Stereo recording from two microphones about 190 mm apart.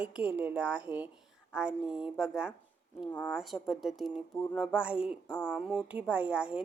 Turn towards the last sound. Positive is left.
turn(degrees=-5)  # may be behind; listen again after turning